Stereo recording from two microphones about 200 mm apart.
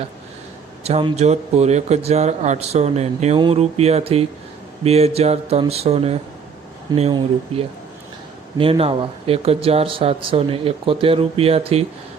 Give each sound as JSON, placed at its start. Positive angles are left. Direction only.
{"t": 0.9, "sound": "speech", "side_deg": -30}